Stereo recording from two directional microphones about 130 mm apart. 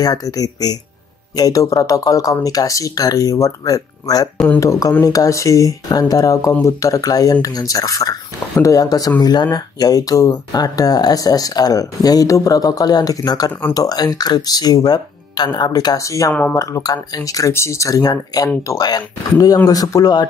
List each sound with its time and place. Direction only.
0.0 s speech: 30° left (ahead or behind)